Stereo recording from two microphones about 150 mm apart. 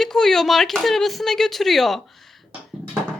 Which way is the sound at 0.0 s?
5° left (ahead or behind).